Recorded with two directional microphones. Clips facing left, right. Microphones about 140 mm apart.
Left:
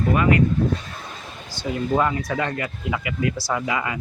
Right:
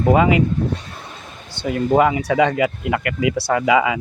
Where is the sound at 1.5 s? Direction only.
60° right (ahead or behind).